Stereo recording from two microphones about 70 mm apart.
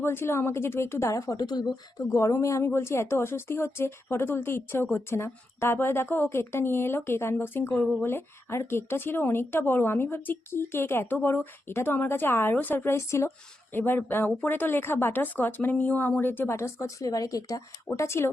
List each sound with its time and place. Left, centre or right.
0.0 s speech: left
2.1 s speech: left
13.7 s speech: left
17.9 s speech: left